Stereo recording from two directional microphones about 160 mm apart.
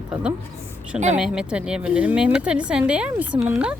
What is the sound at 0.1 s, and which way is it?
Speech, 5° right (ahead or behind).